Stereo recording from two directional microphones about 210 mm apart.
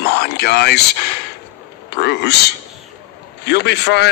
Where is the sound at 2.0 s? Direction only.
55° left (ahead or behind).